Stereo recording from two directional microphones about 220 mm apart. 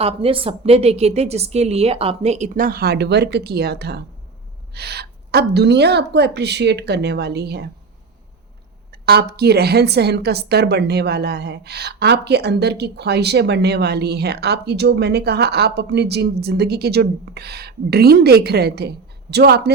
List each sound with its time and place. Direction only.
0.0 s a woman's voice: 25° right (ahead or behind); by 7.7 s 50° right (ahead or behind)
8.9 s a woman's voice: 45° right (ahead or behind)